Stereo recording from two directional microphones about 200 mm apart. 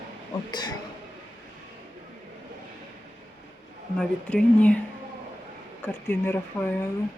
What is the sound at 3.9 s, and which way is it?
Speech, 5° left (ahead or behind).